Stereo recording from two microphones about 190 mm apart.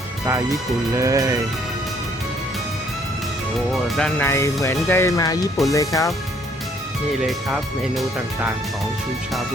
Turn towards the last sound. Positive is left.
turn(degrees=0)  # may be behind; listen again after turning